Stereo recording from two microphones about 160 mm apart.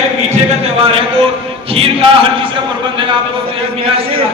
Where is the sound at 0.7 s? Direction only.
35° right (ahead or behind).